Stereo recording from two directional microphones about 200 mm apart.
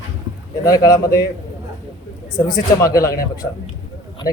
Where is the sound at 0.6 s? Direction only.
20° left (ahead or behind).